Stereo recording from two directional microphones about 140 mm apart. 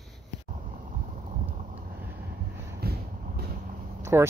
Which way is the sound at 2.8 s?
90° right.